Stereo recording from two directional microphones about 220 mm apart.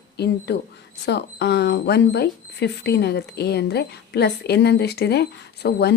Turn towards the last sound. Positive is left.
turn(degrees=45)  # may be behind; listen again after turning